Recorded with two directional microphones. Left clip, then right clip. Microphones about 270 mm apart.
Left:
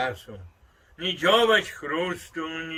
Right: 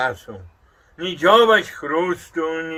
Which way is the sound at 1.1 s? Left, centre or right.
Centre.